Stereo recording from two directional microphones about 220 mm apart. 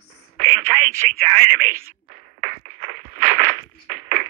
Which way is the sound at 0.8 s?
40° right (ahead or behind).